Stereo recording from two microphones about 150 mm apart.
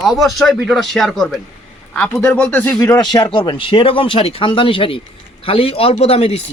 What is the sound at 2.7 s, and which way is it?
A man's voice, 20° left (ahead or behind).